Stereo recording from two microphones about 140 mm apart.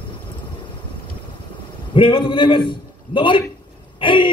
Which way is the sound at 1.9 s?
35° left (ahead or behind).